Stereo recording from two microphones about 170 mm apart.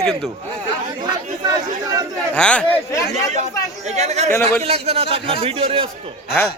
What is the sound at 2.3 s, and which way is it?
Speech, 5° left (ahead or behind).